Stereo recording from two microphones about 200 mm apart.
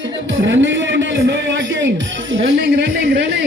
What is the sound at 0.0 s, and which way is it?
A man's voice, 65° right (ahead or behind).